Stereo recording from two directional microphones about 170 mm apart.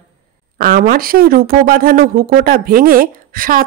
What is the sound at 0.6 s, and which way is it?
Speech, 55° right (ahead or behind).